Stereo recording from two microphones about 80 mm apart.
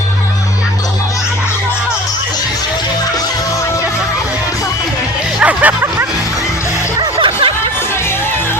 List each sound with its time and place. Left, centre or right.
5.4 s hubbub: centre
7.2 s music: right